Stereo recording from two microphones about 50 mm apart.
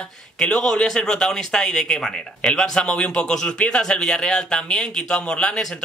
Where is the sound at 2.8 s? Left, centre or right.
Left.